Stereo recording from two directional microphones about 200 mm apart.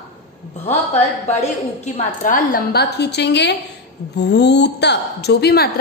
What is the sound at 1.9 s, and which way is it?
A woman's voice, 45° left (ahead or behind).